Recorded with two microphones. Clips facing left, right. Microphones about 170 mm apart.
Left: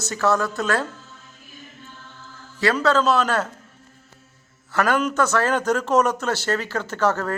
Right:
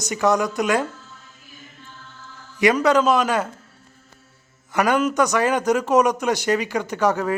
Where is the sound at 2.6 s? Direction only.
15° right (ahead or behind).